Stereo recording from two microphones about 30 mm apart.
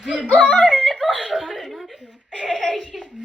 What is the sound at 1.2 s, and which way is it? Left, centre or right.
Chuckle, centre.